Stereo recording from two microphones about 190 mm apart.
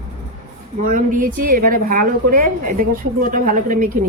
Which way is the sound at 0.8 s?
45° right (ahead or behind).